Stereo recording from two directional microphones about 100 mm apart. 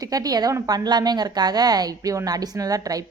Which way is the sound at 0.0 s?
40° right (ahead or behind).